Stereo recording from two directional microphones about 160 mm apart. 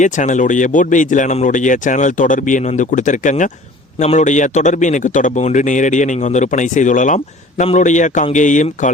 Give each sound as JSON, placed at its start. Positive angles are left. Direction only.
{"t": 0.0, "sound": "speech", "side_deg": 50}